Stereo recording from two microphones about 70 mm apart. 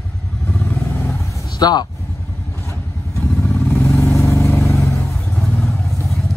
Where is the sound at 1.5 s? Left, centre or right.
Left.